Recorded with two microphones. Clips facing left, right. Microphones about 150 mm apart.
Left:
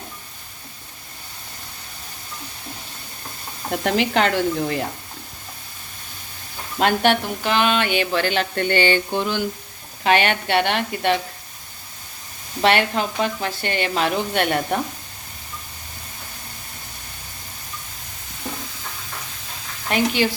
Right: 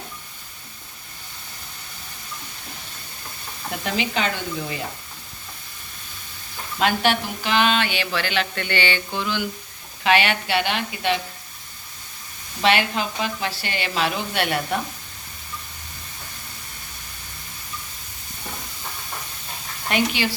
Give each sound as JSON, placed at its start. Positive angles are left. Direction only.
{"t": 3.7, "sound": "speech", "side_deg": 55}
{"t": 4.1, "sound": "speech", "side_deg": 65}
{"t": 6.7, "sound": "speech", "side_deg": 55}
{"t": 12.6, "sound": "speech", "side_deg": 50}